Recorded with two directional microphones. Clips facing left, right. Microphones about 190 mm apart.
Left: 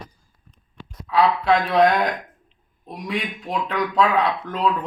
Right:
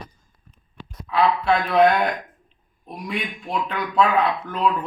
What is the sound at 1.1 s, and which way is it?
Speech, 35° left (ahead or behind).